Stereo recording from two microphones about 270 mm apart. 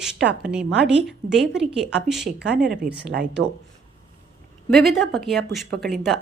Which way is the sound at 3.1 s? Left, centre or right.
Right.